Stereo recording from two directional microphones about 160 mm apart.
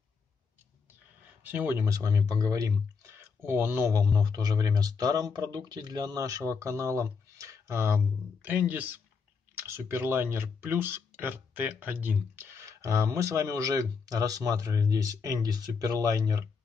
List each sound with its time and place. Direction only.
1.4 s speech: 10° right (ahead or behind)